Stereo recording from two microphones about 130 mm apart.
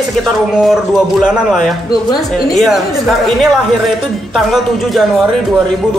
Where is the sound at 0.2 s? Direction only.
Centre (ahead or behind).